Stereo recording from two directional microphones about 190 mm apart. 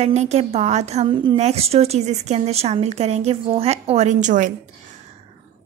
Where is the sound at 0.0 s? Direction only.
35° right (ahead or behind).